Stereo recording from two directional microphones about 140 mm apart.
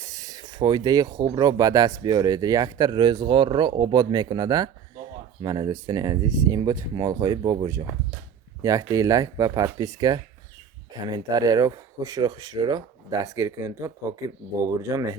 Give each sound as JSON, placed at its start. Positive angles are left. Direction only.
{"t": 0.0, "sound": "speech", "side_deg": -25}